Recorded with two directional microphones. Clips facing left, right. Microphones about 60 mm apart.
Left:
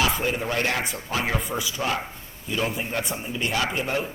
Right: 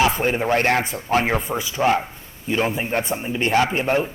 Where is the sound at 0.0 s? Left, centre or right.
Right.